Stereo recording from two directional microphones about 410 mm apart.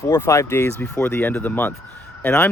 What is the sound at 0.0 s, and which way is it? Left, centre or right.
Speech, centre.